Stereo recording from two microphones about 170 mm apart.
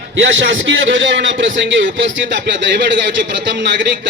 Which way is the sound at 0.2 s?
90° right.